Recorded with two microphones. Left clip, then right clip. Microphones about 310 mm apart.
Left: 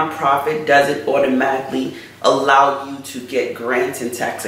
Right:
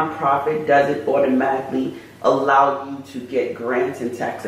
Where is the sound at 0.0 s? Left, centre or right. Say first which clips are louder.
Left 2 dB; centre.